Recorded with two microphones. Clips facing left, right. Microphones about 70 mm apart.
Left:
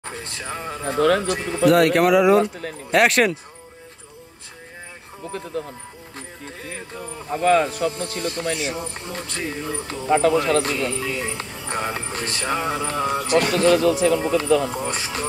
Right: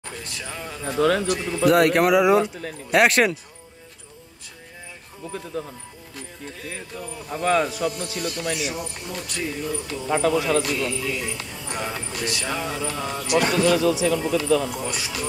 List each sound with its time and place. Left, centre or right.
0.0 s speech: left
1.2 s speech: left
1.7 s speech: centre
6.9 s speech: left
10.0 s speech: left
13.3 s speech: left